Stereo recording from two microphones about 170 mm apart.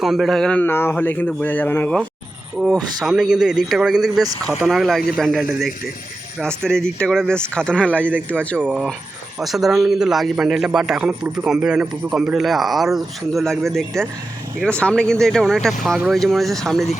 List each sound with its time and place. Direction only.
0.0 s a man's voice: centre (ahead or behind)
4.2 s speech: 20° right (ahead or behind)
4.6 s a man's voice: centre (ahead or behind)
8.5 s a man's voice: 10° right (ahead or behind)